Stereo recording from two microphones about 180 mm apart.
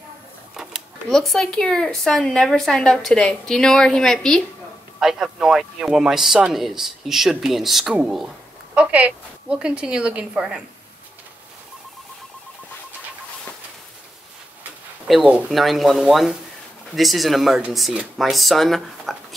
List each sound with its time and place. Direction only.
0.6 s a woman's voice: centre (ahead or behind)
15.0 s speech: 5° right (ahead or behind)